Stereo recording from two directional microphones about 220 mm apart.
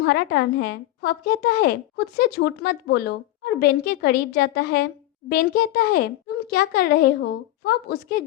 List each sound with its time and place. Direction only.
0.0 s a woman's voice: 45° left (ahead or behind)